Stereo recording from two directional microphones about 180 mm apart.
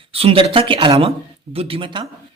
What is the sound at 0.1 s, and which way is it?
Speech, 30° right (ahead or behind).